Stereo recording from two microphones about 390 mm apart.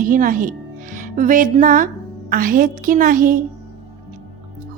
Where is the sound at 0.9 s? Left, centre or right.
Centre.